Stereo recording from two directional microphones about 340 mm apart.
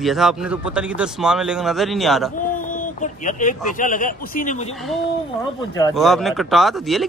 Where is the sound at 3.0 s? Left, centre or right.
Left.